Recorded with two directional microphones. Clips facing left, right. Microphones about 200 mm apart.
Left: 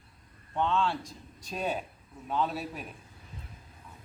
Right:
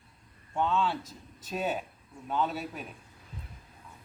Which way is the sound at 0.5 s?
5° right (ahead or behind).